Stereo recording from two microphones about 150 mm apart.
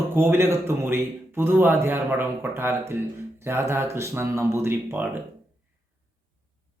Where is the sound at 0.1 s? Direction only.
15° right (ahead or behind).